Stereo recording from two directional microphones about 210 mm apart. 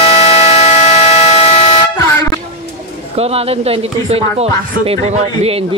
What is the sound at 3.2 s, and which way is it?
Speech, 30° right (ahead or behind).